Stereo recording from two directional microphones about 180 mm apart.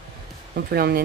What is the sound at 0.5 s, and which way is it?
Speech, 60° right (ahead or behind).